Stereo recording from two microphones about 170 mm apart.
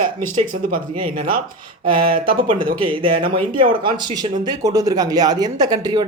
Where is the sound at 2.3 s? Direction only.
30° right (ahead or behind).